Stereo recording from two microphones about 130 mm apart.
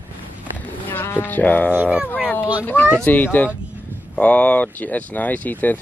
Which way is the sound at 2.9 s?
15° left (ahead or behind).